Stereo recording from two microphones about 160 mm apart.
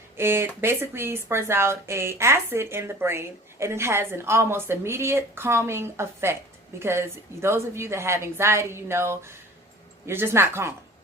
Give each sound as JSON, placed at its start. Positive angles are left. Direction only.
{"t": 0.2, "sound": "speech", "side_deg": -15}